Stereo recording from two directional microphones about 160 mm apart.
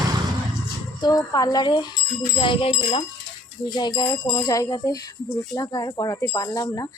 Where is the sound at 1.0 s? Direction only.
25° left (ahead or behind).